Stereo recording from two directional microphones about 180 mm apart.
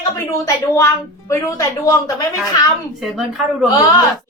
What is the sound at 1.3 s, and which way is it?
A woman's voice, 20° left (ahead or behind).